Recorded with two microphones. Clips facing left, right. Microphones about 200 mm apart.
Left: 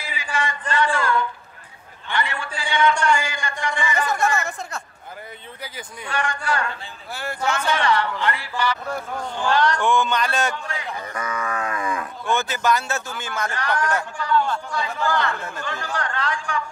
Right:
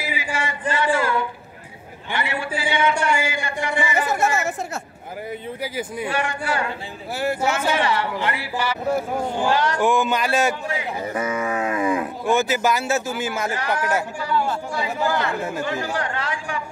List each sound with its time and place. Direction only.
0.1 s a sound: 10° right (ahead or behind)
5.8 s a man's voice: 10° right (ahead or behind)
11.1 s cattle: 25° right (ahead or behind)
12.3 s speech: 5° right (ahead or behind)